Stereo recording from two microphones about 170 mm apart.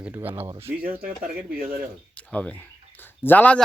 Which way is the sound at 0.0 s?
10° right (ahead or behind).